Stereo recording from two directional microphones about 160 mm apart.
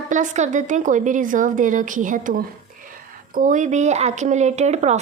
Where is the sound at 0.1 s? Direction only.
50° right (ahead or behind).